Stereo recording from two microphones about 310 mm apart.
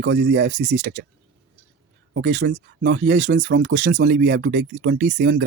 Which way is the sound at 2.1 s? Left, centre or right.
Right.